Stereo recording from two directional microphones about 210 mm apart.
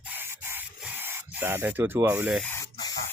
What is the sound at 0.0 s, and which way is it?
Spray, 10° right (ahead or behind).